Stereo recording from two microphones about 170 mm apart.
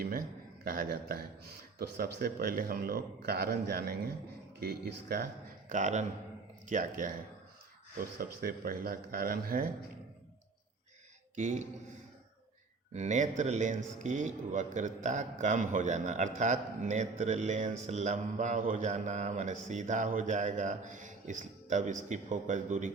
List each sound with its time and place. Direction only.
0.0 s a man's voice: 60° right (ahead or behind)
5.6 s a man's voice: 45° right (ahead or behind)
8.2 s a man's voice: 60° right (ahead or behind)
11.3 s a man's voice: 45° right (ahead or behind)
12.9 s a man's voice: 45° right (ahead or behind)